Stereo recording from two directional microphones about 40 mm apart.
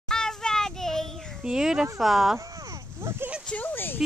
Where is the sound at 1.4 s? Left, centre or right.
Centre.